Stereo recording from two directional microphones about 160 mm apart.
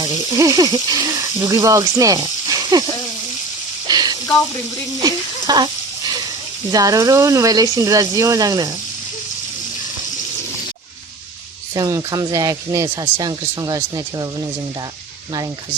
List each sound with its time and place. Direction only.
0.0 s speech: 20° right (ahead or behind)
3.8 s a sound: 25° right (ahead or behind)
4.9 s sizzle: 25° right (ahead or behind)
6.7 s speech: 25° right (ahead or behind)
11.7 s speech: 25° right (ahead or behind)